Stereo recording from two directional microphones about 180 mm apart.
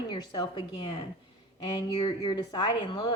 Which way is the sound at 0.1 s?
25° left (ahead or behind).